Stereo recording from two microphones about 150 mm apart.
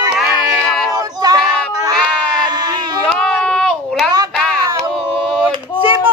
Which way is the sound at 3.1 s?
5° left (ahead or behind).